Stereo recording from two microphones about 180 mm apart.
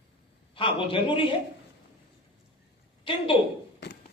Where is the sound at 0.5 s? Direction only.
30° left (ahead or behind).